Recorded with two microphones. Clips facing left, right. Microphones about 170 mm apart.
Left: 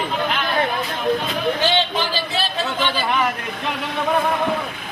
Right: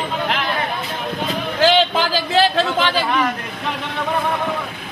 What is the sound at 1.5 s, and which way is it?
Speech, 90° right.